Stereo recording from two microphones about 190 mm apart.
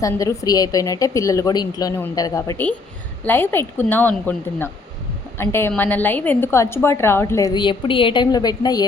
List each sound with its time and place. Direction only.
0.0 s a woman's voice: 15° left (ahead or behind)